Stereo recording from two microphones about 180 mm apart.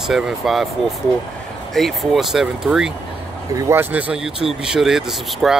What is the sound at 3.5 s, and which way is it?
Speech, 15° right (ahead or behind).